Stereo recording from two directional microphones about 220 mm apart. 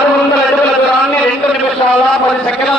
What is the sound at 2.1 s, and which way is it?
Speech, centre (ahead or behind).